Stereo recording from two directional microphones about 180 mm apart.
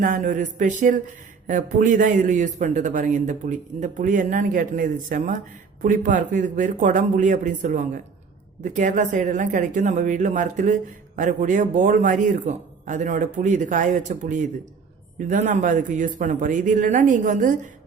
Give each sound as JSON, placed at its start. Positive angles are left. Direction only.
{"t": 0.0, "sound": "a man's voice", "side_deg": -45}